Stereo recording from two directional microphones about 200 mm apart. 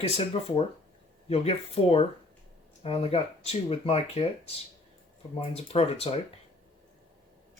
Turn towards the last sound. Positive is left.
turn(degrees=30)  # may be behind; listen again after turning